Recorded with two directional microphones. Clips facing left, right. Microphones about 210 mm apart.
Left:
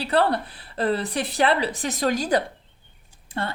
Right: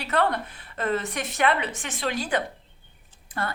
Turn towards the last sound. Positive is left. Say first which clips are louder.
# left 2 dB
turn(degrees=25)  # may be behind; listen again after turning